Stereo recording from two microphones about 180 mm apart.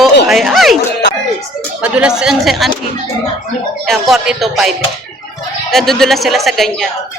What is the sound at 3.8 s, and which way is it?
A man's voice, centre (ahead or behind).